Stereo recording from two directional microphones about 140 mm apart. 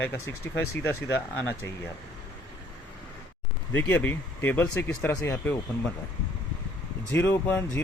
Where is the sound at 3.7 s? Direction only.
10° left (ahead or behind).